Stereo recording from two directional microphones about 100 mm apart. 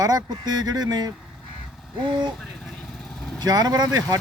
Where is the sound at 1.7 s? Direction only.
Centre (ahead or behind).